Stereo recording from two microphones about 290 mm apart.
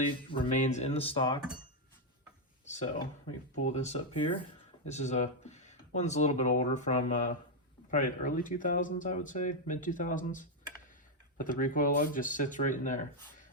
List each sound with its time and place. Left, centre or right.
0.3 s speech: centre
2.6 s speech: left